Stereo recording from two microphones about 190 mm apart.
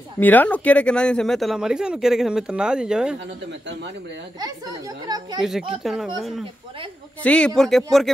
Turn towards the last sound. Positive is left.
turn(degrees=0)  # may be behind; listen again after turning